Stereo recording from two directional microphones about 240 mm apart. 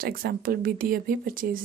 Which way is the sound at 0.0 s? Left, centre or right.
Right.